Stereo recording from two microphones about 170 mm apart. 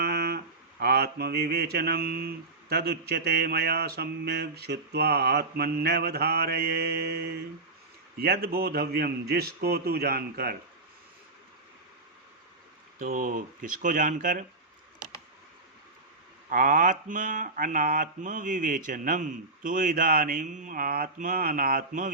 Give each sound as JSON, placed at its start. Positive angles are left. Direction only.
{"t": 0.0, "sound": "mantra", "side_deg": -70}
{"t": 8.2, "sound": "a man's voice", "side_deg": -65}
{"t": 13.0, "sound": "mantra", "side_deg": -55}
{"t": 16.5, "sound": "mantra", "side_deg": -55}